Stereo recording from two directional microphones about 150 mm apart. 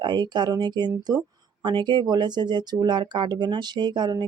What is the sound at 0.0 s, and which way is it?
Speech, 30° right (ahead or behind).